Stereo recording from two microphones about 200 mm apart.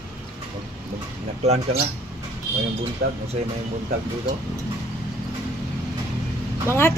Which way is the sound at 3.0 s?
50° right (ahead or behind).